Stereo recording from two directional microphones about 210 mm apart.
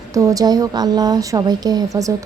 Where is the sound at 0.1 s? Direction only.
15° right (ahead or behind).